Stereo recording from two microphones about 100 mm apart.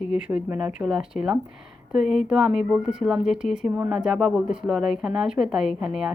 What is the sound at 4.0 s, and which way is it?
Speech, 5° right (ahead or behind).